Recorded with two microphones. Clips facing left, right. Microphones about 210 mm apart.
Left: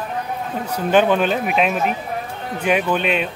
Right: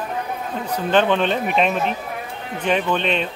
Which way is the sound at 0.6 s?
10° left (ahead or behind).